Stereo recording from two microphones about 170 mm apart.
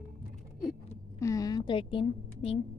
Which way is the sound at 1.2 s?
20° left (ahead or behind).